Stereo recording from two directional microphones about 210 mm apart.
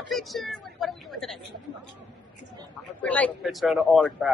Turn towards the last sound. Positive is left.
turn(degrees=0)  # may be behind; listen again after turning